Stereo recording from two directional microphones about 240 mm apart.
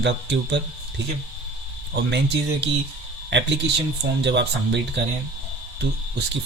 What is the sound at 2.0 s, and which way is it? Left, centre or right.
Speech, right.